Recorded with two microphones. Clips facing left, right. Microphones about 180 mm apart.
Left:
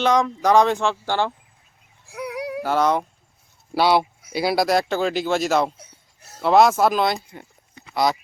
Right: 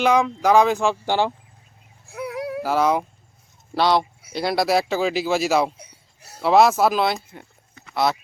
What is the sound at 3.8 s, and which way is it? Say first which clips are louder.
Speech: left 1 dB; 10° left (ahead or behind).